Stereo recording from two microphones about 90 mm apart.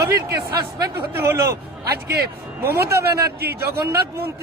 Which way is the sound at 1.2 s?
30° right (ahead or behind).